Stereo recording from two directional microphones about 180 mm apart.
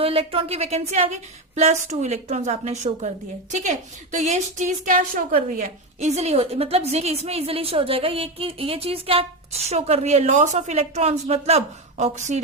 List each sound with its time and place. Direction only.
0.0 s a woman's voice: 30° right (ahead or behind)